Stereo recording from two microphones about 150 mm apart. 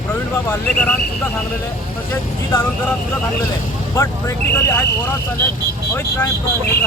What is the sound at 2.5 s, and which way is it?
Speech, 15° left (ahead or behind).